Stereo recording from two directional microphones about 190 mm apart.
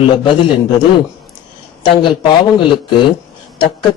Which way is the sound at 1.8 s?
25° left (ahead or behind).